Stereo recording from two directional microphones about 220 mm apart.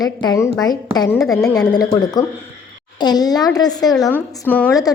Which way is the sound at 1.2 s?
Centre (ahead or behind).